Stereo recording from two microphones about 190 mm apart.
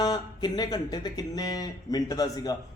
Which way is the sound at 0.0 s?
20° left (ahead or behind).